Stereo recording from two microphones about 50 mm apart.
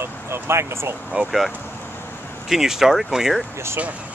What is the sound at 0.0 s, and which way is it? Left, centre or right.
Speech, right.